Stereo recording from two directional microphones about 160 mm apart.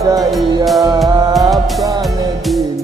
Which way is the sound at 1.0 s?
25° right (ahead or behind).